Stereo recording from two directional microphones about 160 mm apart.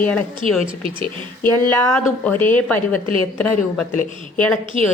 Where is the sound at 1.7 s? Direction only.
10° left (ahead or behind).